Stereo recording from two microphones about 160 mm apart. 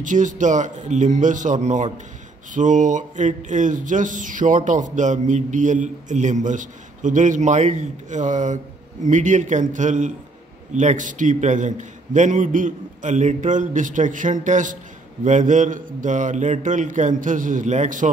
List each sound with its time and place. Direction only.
0.0 s speech: 55° right (ahead or behind)